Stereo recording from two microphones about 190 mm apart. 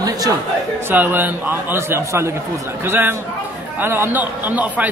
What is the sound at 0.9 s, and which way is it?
A man's voice, 10° right (ahead or behind).